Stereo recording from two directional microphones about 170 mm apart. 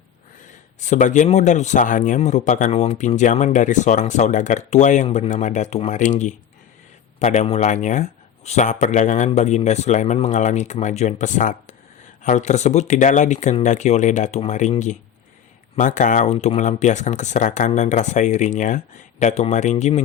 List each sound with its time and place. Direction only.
0.8 s speech: 45° left (ahead or behind)